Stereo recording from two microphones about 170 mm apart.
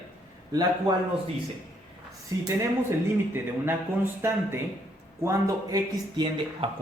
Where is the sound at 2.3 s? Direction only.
20° right (ahead or behind).